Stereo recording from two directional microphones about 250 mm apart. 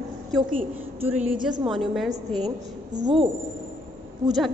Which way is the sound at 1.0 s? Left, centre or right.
Centre.